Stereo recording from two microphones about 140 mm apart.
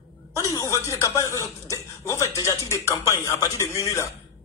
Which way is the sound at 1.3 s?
20° left (ahead or behind).